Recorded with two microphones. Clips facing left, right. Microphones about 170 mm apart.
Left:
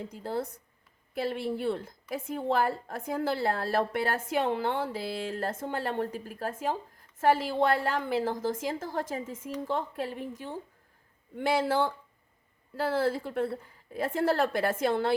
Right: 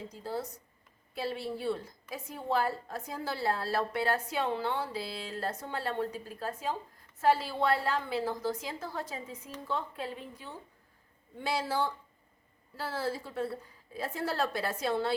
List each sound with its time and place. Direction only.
0.1 s a woman's voice: 55° left (ahead or behind)